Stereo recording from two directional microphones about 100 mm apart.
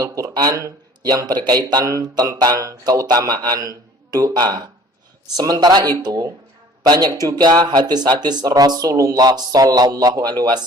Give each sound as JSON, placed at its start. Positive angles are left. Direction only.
{"t": 0.0, "sound": "speech", "side_deg": -35}